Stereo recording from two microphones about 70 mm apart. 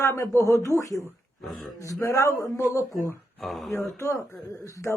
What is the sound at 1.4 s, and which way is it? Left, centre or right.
Speech, centre.